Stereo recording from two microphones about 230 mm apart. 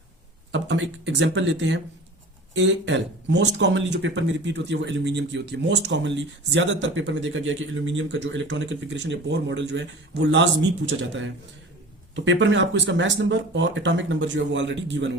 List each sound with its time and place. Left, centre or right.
0.5 s speech: right